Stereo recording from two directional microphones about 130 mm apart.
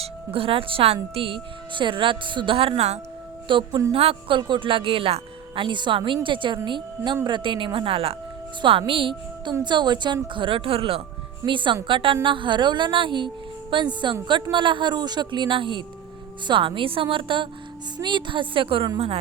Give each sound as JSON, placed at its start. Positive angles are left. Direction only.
{"t": 0.0, "sound": "a woman's voice", "side_deg": -45}
{"t": 3.5, "sound": "a woman's voice", "side_deg": -30}
{"t": 3.9, "sound": "a woman's voice", "side_deg": -45}